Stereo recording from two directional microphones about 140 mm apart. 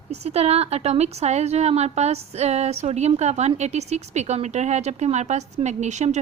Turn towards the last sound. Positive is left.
turn(degrees=-55)  # may be behind; listen again after turning